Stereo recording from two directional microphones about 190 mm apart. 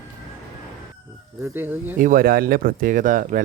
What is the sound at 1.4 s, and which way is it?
Speech, 10° right (ahead or behind).